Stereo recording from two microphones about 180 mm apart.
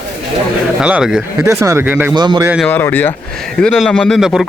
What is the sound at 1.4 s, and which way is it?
Speech, 15° right (ahead or behind).